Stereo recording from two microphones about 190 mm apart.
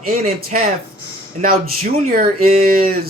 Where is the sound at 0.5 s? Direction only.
40° right (ahead or behind).